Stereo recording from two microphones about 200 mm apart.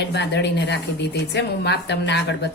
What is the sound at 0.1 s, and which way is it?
A woman's voice, 60° left (ahead or behind).